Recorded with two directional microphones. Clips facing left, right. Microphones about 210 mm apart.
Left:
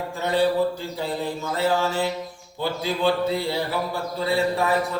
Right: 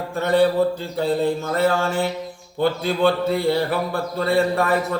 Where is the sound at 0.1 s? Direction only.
55° right (ahead or behind).